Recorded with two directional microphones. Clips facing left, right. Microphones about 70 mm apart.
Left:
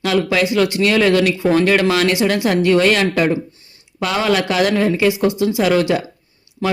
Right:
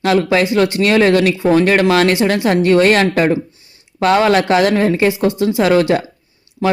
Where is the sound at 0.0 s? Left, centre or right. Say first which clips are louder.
Right 3 dB; right.